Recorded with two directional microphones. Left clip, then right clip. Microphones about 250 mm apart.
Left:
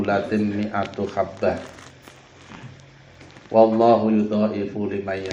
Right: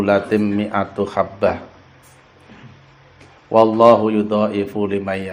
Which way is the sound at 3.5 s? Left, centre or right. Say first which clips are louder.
Right 4 dB; right.